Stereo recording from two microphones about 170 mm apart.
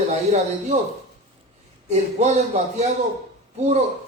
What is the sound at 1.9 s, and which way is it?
A man's voice, 40° right (ahead or behind).